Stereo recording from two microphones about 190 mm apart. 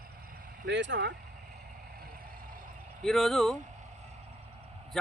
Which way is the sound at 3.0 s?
Centre (ahead or behind).